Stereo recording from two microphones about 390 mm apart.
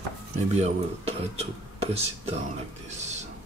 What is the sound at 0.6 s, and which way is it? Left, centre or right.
Speech, centre.